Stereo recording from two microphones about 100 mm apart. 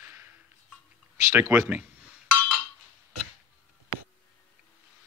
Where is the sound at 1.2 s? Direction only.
25° right (ahead or behind).